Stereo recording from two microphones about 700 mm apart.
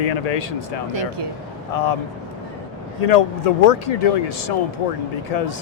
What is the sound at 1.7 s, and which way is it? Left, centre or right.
Speech, left.